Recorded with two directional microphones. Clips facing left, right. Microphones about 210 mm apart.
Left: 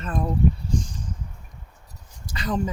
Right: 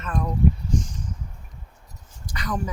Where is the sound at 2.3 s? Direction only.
25° left (ahead or behind).